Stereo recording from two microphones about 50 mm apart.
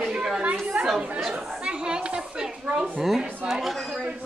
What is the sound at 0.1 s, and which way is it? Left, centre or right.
Chatter, centre.